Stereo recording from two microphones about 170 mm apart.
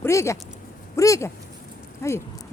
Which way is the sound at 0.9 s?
20° left (ahead or behind).